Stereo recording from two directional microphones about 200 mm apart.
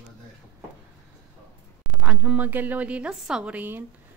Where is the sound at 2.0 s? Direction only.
5° right (ahead or behind).